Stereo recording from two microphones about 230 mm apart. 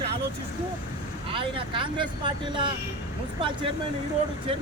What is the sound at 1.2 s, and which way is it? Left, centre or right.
Speech, right.